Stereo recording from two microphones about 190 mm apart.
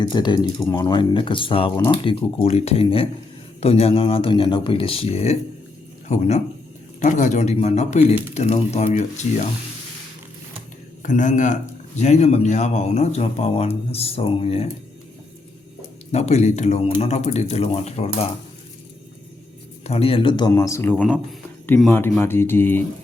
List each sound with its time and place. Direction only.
0.1 s speech: 20° left (ahead or behind)
11.0 s speech: 40° left (ahead or behind)
16.1 s speech: 35° left (ahead or behind)
19.8 s speech: 30° left (ahead or behind)
20.5 s speech: 15° left (ahead or behind)